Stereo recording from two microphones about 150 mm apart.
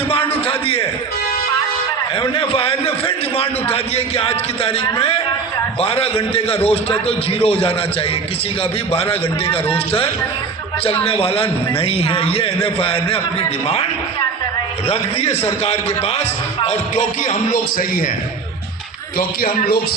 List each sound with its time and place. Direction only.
0.1 s a sound: 35° left (ahead or behind)
2.2 s a man's voice: 35° left (ahead or behind)
8.9 s a man's voice: 40° left (ahead or behind)
14.8 s a man's voice: 45° left (ahead or behind); by 18.0 s 65° left (ahead or behind)
19.4 s a man's voice: 75° left (ahead or behind)